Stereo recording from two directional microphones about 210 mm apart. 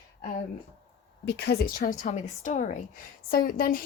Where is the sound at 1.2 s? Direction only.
50° left (ahead or behind).